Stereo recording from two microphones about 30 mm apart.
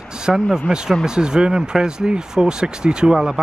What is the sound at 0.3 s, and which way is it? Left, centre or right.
Speech, centre.